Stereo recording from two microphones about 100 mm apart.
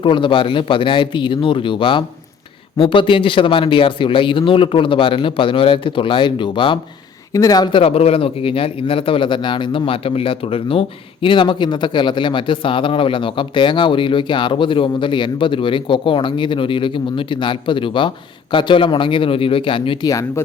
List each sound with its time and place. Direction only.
0.0 s a man's voice: 60° left (ahead or behind)
7.3 s speech: 35° left (ahead or behind)
7.8 s a man's voice: 80° left; by 20.1 s 60° left (ahead or behind)
20.1 s speech: 30° left (ahead or behind)